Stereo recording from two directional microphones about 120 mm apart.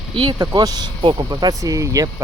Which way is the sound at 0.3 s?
35° right (ahead or behind).